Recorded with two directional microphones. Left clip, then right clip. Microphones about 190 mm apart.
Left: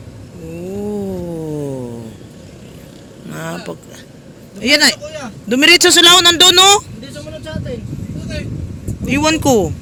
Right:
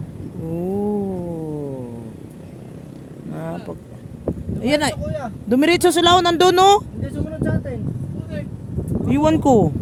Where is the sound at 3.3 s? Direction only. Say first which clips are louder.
Left 4 dB; 5° right (ahead or behind).